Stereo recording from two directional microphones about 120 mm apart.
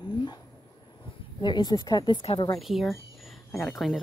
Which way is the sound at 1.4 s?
35° left (ahead or behind).